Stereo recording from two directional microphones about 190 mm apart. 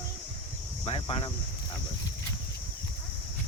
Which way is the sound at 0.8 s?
30° left (ahead or behind).